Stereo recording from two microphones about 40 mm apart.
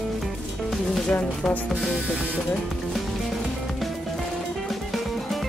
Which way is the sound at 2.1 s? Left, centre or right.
Right.